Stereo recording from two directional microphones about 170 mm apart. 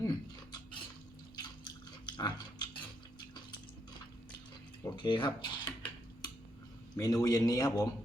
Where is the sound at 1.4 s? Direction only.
25° left (ahead or behind).